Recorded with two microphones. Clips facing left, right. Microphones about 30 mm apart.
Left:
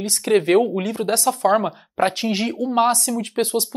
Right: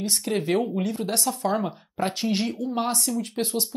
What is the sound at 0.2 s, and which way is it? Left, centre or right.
Speech, left.